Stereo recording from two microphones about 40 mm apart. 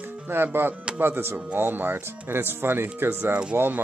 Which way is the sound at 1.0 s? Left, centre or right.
Right.